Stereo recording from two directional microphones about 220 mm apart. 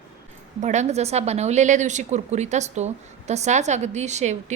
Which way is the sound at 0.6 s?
30° right (ahead or behind).